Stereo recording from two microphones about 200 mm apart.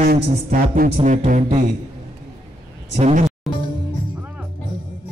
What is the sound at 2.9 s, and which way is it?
Speech, 35° right (ahead or behind).